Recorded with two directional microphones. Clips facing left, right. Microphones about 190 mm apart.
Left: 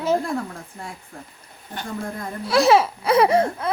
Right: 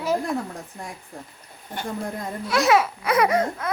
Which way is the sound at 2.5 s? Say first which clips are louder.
Left 3 dB; 30° left (ahead or behind).